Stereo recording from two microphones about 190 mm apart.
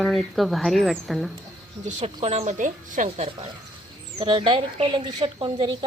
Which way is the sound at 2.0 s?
35° right (ahead or behind).